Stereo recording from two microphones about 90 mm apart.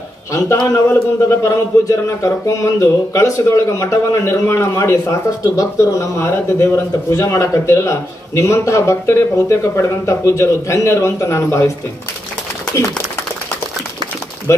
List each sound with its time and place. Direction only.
0.9 s a man's voice: 35° left (ahead or behind)